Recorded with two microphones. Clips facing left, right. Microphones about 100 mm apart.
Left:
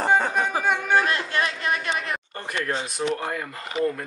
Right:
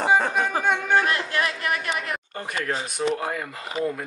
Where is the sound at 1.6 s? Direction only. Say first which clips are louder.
Left 1 dB; 25° left (ahead or behind).